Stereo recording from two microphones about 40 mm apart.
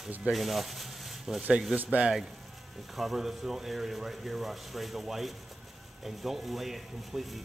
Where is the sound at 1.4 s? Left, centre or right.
Right.